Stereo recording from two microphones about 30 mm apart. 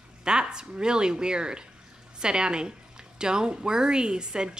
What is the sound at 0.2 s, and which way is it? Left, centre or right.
A woman's voice, right.